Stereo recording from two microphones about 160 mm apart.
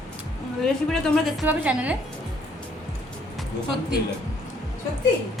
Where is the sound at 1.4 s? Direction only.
10° right (ahead or behind).